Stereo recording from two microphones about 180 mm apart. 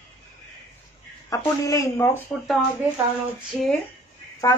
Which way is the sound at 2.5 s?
Centre (ahead or behind).